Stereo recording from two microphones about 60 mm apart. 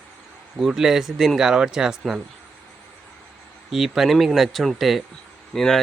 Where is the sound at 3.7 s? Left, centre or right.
Centre.